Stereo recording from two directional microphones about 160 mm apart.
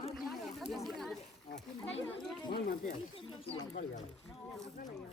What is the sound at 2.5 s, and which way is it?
Speech, 60° left (ahead or behind).